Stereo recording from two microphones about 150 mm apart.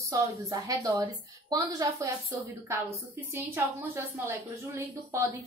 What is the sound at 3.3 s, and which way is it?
A woman's voice, 15° right (ahead or behind).